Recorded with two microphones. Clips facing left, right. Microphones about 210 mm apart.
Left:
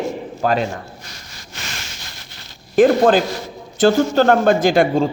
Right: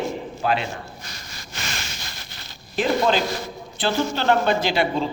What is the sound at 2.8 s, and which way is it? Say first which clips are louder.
A man's voice: left 8 dB; 50° left (ahead or behind).